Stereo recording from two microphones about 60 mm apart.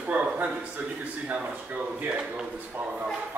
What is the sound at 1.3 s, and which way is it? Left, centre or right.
Speech, right.